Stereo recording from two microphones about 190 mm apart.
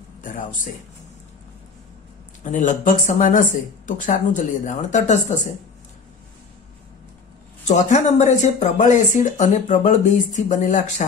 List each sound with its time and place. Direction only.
0.2 s speech: 45° left (ahead or behind)
2.4 s speech: 40° left (ahead or behind)
7.6 s speech: 40° left (ahead or behind)